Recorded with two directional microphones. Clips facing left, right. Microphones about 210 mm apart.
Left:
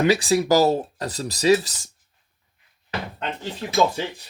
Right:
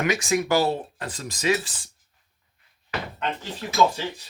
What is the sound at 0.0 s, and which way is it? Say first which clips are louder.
Speech: left 5 dB; 35° left (ahead or behind).